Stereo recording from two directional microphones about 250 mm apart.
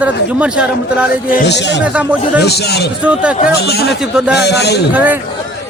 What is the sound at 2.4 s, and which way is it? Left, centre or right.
Speech, left.